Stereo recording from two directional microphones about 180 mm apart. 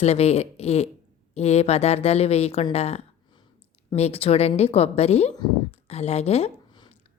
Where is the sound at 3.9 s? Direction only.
35° left (ahead or behind).